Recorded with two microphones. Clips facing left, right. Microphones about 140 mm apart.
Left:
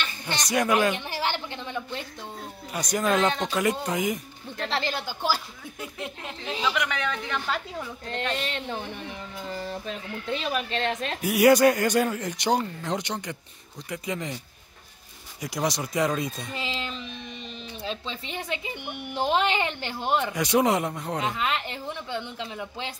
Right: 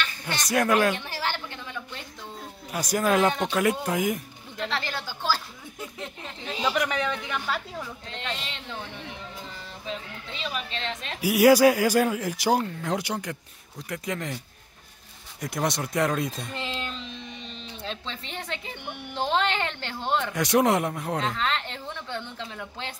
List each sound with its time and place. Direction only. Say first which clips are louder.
0.5 s a man's voice: right 1 dB; centre (ahead or behind)
0.9 s a woman's voice: left 2 dB; 20° left (ahead or behind)
2.7 s a man's voice: right 1 dB; 5° right (ahead or behind)
4.6 s speech: left 3 dB; 30° left (ahead or behind)
4.9 s speech: left 1 dB; 15° left (ahead or behind)
6.6 s speech: right 2 dB; 35° right (ahead or behind)
7.1 s a woman's voice: even; 10° right (ahead or behind)
8.4 s speech: left 6 dB; 50° left (ahead or behind)
11.1 s a man's voice: right 1 dB; centre (ahead or behind)
15.4 s a man's voice: even; centre (ahead or behind)
20.3 s a man's voice: right 2 dB; centre (ahead or behind)
21.2 s speech: left 2 dB; 10° left (ahead or behind)